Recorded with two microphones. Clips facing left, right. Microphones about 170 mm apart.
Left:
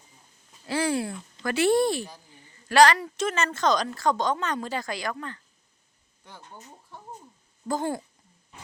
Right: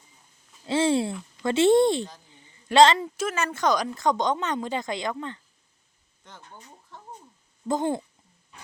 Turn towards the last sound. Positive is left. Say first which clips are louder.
# right 3 dB
turn(degrees=-20)  # may be behind; listen again after turning